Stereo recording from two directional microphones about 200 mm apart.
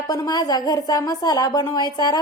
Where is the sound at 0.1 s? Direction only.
20° left (ahead or behind).